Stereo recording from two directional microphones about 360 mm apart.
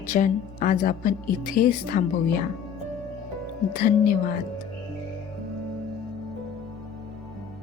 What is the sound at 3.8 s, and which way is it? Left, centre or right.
Speech, left.